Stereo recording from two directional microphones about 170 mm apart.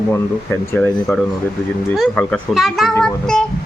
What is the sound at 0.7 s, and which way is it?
Speech, 10° left (ahead or behind).